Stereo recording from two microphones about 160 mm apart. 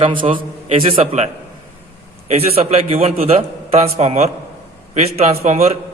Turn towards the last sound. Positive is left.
turn(degrees=-45)  # may be behind; listen again after turning